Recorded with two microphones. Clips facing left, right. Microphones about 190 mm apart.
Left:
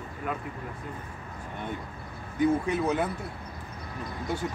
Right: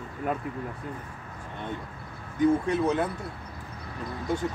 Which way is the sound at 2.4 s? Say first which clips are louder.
Right 2 dB; 5° left (ahead or behind).